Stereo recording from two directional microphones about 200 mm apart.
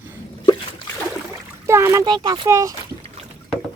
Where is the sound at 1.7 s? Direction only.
15° right (ahead or behind).